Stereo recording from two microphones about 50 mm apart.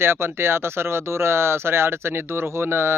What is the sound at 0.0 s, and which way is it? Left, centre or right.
Speech, right.